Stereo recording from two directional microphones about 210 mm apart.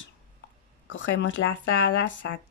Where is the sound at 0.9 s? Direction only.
60° left (ahead or behind).